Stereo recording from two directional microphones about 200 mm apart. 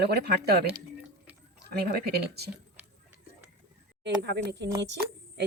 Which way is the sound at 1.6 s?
55° right (ahead or behind).